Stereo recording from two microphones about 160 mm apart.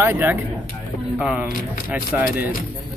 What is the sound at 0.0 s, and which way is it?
Speech, 15° right (ahead or behind).